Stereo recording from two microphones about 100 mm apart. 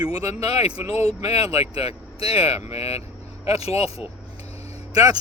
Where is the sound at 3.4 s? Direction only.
90° left.